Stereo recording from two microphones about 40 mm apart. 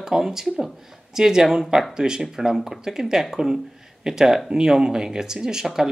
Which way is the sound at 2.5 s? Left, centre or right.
Centre.